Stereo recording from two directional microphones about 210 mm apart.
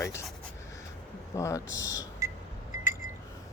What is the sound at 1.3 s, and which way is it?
Speech, 15° left (ahead or behind).